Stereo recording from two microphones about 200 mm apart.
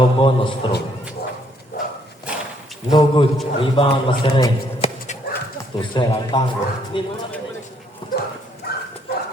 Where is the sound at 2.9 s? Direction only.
25° left (ahead or behind).